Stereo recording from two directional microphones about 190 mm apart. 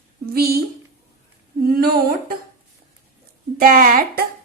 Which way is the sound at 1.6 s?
50° right (ahead or behind).